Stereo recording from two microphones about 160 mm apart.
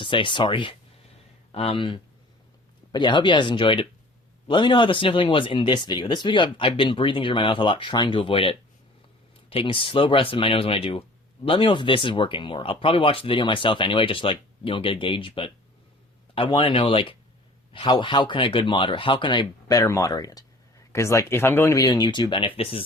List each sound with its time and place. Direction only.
0.0 s speech: 30° left (ahead or behind)